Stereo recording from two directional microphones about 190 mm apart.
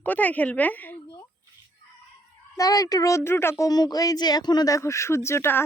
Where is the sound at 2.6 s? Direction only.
20° left (ahead or behind).